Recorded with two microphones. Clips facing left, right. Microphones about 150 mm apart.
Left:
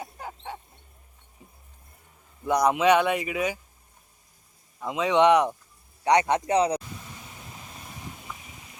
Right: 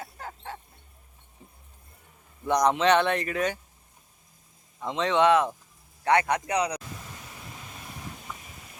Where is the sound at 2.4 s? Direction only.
10° left (ahead or behind).